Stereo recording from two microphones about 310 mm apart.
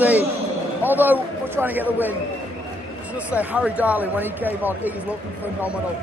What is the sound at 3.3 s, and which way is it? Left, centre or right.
Speech, centre.